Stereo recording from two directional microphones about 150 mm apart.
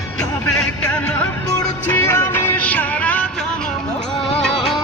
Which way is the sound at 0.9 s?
10° left (ahead or behind).